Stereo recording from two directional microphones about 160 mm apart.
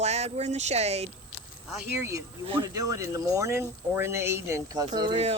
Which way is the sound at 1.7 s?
15° right (ahead or behind).